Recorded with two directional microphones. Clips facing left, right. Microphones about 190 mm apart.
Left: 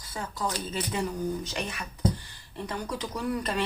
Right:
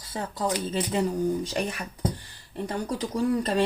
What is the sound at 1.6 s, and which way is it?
Speech, 40° right (ahead or behind).